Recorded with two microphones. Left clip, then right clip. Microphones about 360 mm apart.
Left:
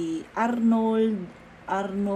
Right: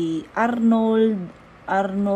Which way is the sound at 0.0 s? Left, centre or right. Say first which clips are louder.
Right 5 dB; right.